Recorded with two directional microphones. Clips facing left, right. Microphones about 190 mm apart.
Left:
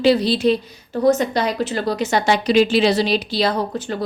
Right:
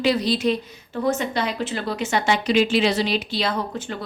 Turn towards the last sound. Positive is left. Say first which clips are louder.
# left 5 dB
turn(degrees=35)  # may be behind; listen again after turning